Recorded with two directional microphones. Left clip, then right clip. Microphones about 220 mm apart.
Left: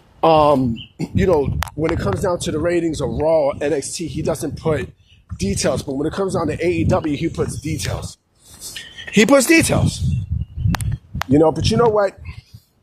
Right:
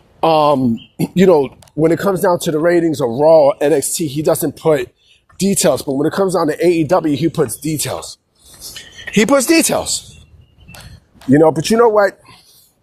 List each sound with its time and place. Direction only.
0.2 s speech: 45° right (ahead or behind); by 8.0 s 25° right (ahead or behind)
8.7 s a sound: 5° right (ahead or behind)
9.1 s speech: 10° right (ahead or behind)
9.6 s speech: 25° right (ahead or behind)
11.4 s speech: 30° right (ahead or behind)